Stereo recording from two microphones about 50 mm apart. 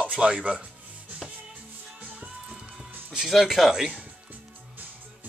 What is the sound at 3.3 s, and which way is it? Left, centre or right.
Speech, centre.